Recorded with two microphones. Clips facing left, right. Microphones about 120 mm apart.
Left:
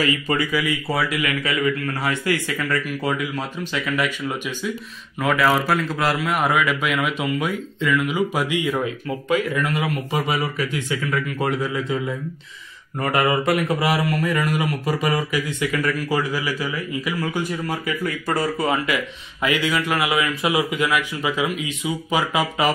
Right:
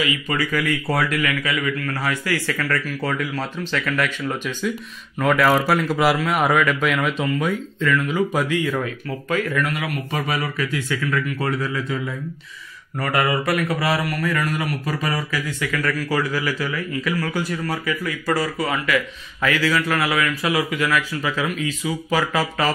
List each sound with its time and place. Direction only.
0.5 s speech: 5° left (ahead or behind)
1.2 s a man's voice: 25° left (ahead or behind)
13.0 s a man's voice: 20° left (ahead or behind)